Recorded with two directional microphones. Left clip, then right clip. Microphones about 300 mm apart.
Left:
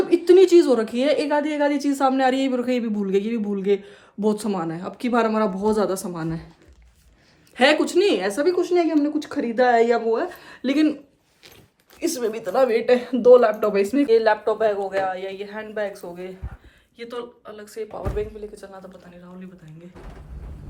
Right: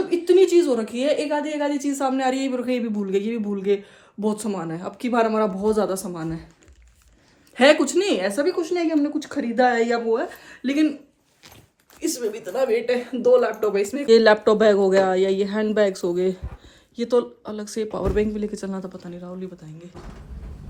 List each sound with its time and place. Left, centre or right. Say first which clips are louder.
0.1 s a woman's voice: left 3 dB; centre
7.5 s a woman's voice: right 1 dB; centre
11.9 s speech: left 2 dB; centre
14.1 s speech: right 6 dB; right